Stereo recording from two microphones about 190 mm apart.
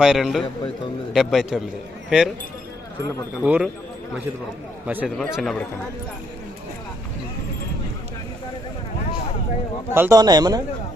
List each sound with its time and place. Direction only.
0.0 s a man's voice: centre (ahead or behind)
3.4 s speech: 5° right (ahead or behind)
4.9 s speech: 10° right (ahead or behind)
5.1 s a man's voice: centre (ahead or behind)
9.9 s speech: 15° right (ahead or behind)